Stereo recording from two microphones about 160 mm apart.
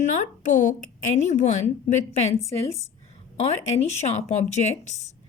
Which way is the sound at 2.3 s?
20° left (ahead or behind).